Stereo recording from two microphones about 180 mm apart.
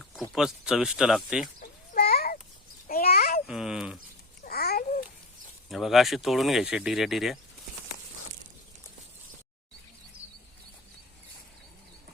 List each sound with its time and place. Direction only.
0.3 s speech: 5° right (ahead or behind)
1.9 s a sound: 60° left (ahead or behind)
3.4 s speech: 5° right (ahead or behind)
4.4 s babbling: 60° left (ahead or behind)
5.6 s speech: centre (ahead or behind)